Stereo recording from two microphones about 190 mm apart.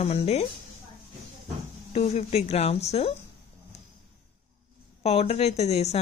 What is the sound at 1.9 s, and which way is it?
Speech, 35° left (ahead or behind).